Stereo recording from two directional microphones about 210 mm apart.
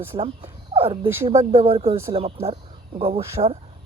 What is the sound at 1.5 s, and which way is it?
Speech, 25° right (ahead or behind).